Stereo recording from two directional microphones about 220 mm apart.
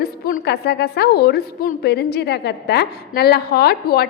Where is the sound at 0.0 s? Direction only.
40° left (ahead or behind).